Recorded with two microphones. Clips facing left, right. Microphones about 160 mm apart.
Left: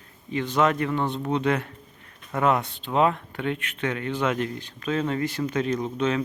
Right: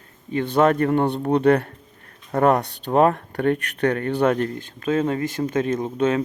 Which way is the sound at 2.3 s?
40° right (ahead or behind).